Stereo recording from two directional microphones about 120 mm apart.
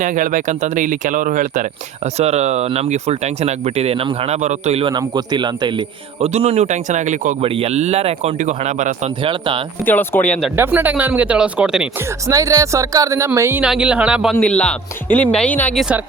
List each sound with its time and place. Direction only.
0.0 s speech: 90° right
2.1 s speech: 65° right (ahead or behind)
4.8 s a man's voice: 40° right (ahead or behind)
6.2 s speech: 55° right (ahead or behind); by 7.3 s 85° right
7.4 s speech: 60° right (ahead or behind); by 8.9 s 80° right
9.8 s speech: 15° left (ahead or behind)
10.6 s speech: 15° right (ahead or behind)
12.3 s speech: 30° right (ahead or behind)
13.6 s speech: 10° right (ahead or behind)
14.3 s speech: 10° left (ahead or behind)
15.7 s speech: centre (ahead or behind)